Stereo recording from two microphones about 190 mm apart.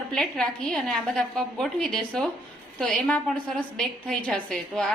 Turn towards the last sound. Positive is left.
turn(degrees=0)  # may be behind; listen again after turning